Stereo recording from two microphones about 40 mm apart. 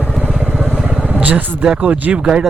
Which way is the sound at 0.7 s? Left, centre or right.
Right.